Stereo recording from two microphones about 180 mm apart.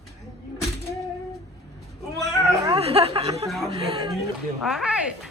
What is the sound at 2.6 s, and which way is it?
A woman's voice, 35° right (ahead or behind).